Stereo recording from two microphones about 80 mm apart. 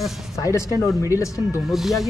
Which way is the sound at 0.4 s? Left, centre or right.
Left.